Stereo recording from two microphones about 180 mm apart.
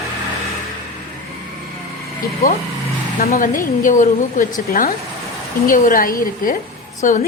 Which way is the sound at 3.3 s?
45° left (ahead or behind).